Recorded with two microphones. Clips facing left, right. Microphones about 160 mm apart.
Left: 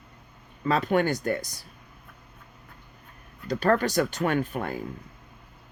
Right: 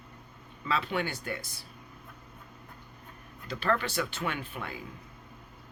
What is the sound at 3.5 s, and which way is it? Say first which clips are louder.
Speech: left 7 dB; 45° left (ahead or behind).